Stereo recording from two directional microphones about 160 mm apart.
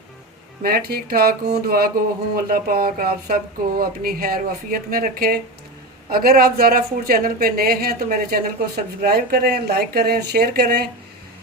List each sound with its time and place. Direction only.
0.6 s speech: 75° right (ahead or behind)